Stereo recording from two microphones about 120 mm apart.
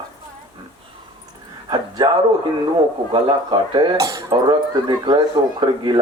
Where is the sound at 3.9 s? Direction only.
25° right (ahead or behind).